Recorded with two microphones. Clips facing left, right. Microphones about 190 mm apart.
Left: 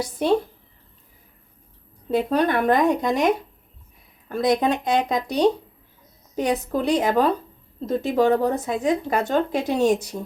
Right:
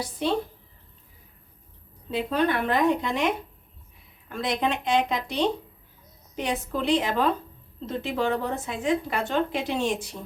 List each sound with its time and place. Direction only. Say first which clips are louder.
0.2 s speech: left 6 dB; 50° left (ahead or behind)
2.0 s speech: left 4 dB; 45° left (ahead or behind)